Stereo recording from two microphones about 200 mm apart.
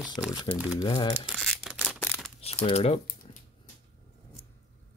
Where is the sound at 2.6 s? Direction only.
30° left (ahead or behind).